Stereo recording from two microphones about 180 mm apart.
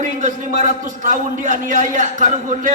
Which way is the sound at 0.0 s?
45° right (ahead or behind).